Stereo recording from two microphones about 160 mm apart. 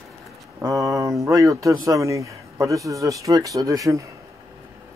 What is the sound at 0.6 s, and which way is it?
Speech, 20° right (ahead or behind).